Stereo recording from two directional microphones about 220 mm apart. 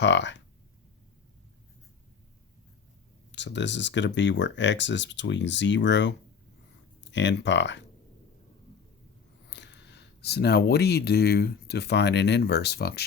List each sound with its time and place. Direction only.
0.0 s speech: 55° left (ahead or behind)
3.3 s speech: 55° left (ahead or behind)
9.5 s speech: 50° left (ahead or behind)